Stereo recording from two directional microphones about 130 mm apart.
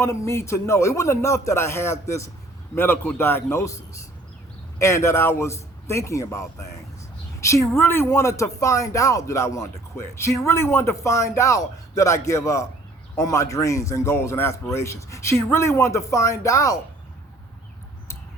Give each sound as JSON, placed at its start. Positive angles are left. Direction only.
{"t": 0.0, "sound": "speech", "side_deg": 25}
{"t": 7.8, "sound": "speech", "side_deg": 20}